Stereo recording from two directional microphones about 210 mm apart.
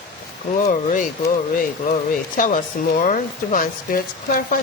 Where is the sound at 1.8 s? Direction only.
40° left (ahead or behind).